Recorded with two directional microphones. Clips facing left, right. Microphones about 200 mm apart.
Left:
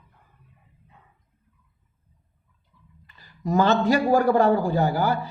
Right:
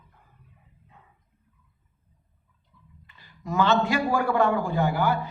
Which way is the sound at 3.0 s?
40° left (ahead or behind).